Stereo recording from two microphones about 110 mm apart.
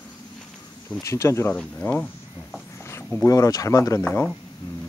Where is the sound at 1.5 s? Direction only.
15° left (ahead or behind).